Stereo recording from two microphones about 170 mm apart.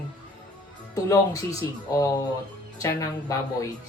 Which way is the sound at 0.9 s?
20° left (ahead or behind).